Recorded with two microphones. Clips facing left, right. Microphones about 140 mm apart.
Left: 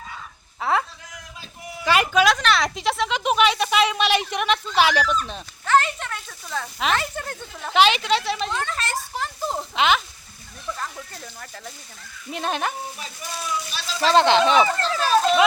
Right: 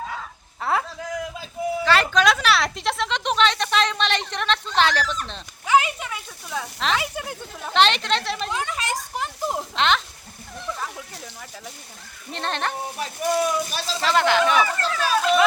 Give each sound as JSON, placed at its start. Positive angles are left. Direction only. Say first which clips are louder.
{"t": 0.6, "sound": "a sound", "louder": "left 1 dB", "side_deg": 0}
{"t": 1.8, "sound": "a sound", "louder": "left 2 dB", "side_deg": 15}
{"t": 2.2, "sound": "speech", "louder": "even", "side_deg": -5}
{"t": 5.6, "sound": "speech", "louder": "even", "side_deg": -10}
{"t": 7.7, "sound": "speech", "louder": "left 2 dB", "side_deg": 5}
{"t": 9.7, "sound": "speech", "louder": "left 2 dB", "side_deg": 5}
{"t": 10.8, "sound": "speech", "louder": "even", "side_deg": -5}
{"t": 12.3, "sound": "speech", "louder": "left 1 dB", "side_deg": 10}
{"t": 13.0, "sound": "speech", "louder": "right 11 dB", "side_deg": -60}
{"t": 14.0, "sound": "speech", "louder": "left 3 dB", "side_deg": 25}